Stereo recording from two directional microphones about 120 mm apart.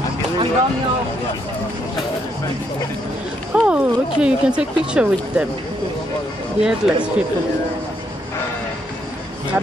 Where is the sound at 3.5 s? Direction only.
10° right (ahead or behind).